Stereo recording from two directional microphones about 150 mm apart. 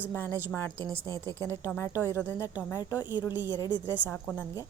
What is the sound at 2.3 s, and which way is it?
Speech, 10° right (ahead or behind).